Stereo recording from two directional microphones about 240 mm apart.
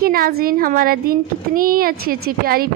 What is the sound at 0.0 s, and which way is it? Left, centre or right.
A woman's voice, right.